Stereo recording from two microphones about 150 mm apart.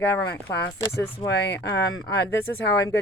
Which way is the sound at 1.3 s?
90° left.